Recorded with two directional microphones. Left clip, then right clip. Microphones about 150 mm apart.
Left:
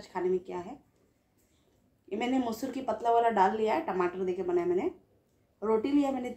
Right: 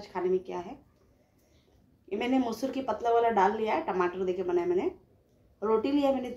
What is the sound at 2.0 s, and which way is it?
A woman's voice, 10° left (ahead or behind).